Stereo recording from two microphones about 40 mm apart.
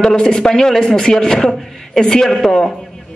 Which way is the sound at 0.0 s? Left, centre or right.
Centre.